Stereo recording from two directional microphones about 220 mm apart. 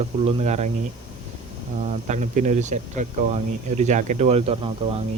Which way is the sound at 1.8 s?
30° right (ahead or behind).